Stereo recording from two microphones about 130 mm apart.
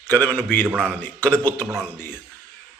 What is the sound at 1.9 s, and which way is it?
Mantra, 15° left (ahead or behind).